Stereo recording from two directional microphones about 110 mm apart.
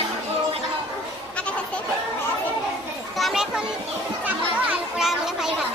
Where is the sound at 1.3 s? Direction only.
10° left (ahead or behind).